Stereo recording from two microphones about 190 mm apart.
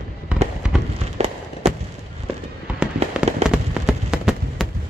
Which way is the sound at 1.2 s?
35° right (ahead or behind).